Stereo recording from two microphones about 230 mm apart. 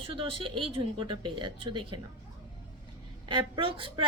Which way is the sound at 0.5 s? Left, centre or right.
Right.